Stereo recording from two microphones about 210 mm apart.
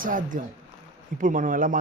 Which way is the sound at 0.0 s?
40° right (ahead or behind).